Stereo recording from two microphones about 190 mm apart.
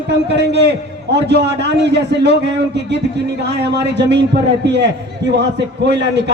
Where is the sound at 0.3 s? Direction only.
65° right (ahead or behind).